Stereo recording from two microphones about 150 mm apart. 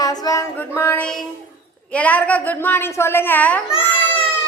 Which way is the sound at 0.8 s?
15° left (ahead or behind).